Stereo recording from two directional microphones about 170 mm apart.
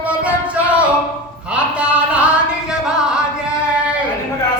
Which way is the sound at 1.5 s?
5° right (ahead or behind).